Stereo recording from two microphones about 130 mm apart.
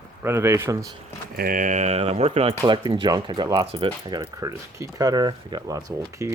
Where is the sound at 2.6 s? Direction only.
35° right (ahead or behind).